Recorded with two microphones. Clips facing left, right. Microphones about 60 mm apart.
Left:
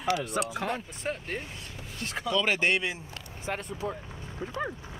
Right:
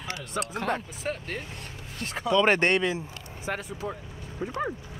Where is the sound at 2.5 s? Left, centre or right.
Right.